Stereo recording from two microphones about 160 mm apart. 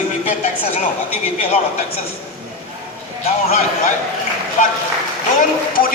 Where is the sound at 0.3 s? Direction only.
50° left (ahead or behind).